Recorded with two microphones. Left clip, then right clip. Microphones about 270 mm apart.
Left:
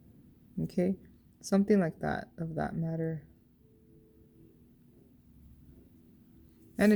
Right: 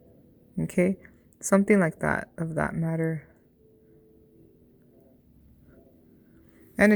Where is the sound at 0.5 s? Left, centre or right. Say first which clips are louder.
Right 7 dB; centre.